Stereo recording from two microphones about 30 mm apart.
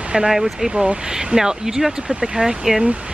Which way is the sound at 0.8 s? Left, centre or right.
Centre.